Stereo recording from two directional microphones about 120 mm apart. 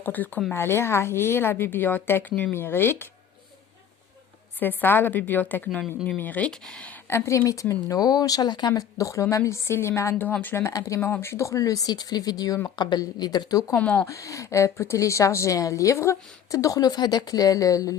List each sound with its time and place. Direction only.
0.0 s a woman's voice: 15° left (ahead or behind)
4.6 s a woman's voice: 15° left (ahead or behind)
7.1 s a woman's voice: 20° left (ahead or behind)
13.7 s a woman's voice: 10° left (ahead or behind)
14.1 s a woman's voice: 25° left (ahead or behind)